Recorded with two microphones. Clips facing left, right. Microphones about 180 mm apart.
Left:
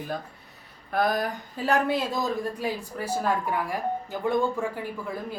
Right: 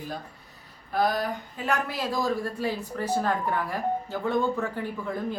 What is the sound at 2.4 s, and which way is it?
Speech, 15° left (ahead or behind).